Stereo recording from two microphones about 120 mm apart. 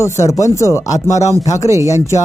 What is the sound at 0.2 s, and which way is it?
Speech, 25° left (ahead or behind).